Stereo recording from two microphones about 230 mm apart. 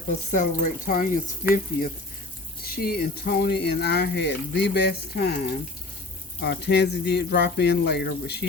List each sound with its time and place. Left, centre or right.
0.3 s speech: left
2.7 s speech: left